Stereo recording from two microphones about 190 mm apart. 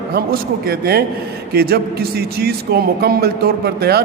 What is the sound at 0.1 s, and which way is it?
A man's voice, 55° right (ahead or behind).